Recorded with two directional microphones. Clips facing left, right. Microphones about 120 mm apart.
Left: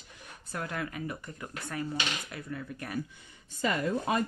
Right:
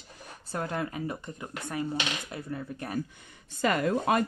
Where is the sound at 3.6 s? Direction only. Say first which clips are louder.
Right 4 dB; 70° right (ahead or behind).